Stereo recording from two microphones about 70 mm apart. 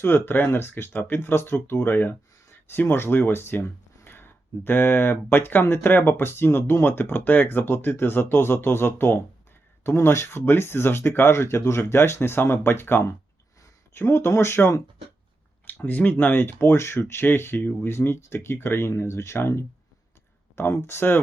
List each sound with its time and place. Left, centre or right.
0.0 s speech: left
15.6 s speech: left